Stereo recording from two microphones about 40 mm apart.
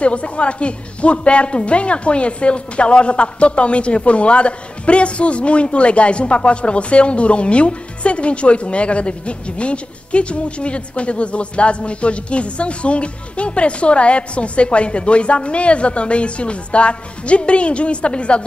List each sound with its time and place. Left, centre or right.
0.0 s a woman's voice: left